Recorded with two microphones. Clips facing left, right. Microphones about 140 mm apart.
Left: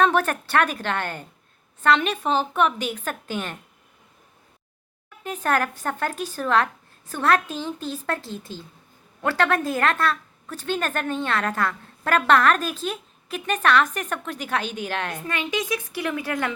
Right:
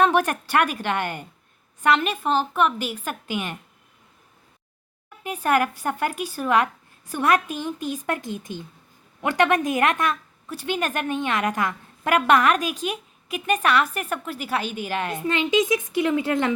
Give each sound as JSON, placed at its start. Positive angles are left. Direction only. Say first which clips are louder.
{"t": 0.0, "sound": "a woman's voice", "louder": "right 1 dB", "side_deg": -10}
{"t": 5.2, "sound": "a woman's voice", "louder": "right 2 dB", "side_deg": -10}
{"t": 15.3, "sound": "speech", "louder": "right 7 dB", "side_deg": -20}